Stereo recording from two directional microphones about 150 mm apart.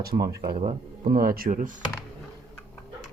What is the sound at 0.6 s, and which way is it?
Speech, 40° right (ahead or behind).